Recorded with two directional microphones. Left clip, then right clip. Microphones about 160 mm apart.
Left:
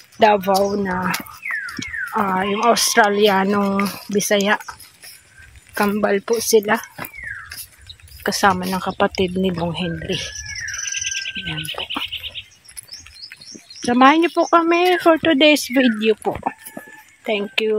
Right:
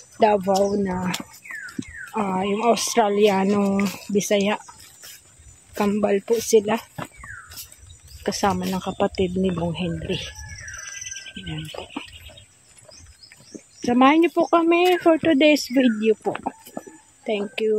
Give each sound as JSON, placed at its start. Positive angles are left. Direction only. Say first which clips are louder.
{"t": 0.2, "sound": "speech", "louder": "left 4 dB", "side_deg": 10}
{"t": 5.8, "sound": "speech", "louder": "left 3 dB", "side_deg": 10}
{"t": 8.2, "sound": "speech", "louder": "left 6 dB", "side_deg": 15}
{"t": 11.1, "sound": "bird", "louder": "left 11 dB", "side_deg": -55}
{"t": 11.8, "sound": "frog", "louder": "left 10 dB", "side_deg": 5}
{"t": 13.7, "sound": "speech", "louder": "left 4 dB", "side_deg": 10}
{"t": 16.4, "sound": "chicken", "louder": "left 5 dB", "side_deg": 20}